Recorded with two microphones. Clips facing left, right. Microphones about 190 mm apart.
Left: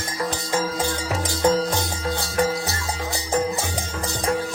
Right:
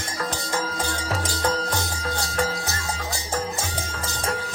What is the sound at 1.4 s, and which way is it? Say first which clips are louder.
Music: left 7 dB; 20° left (ahead or behind).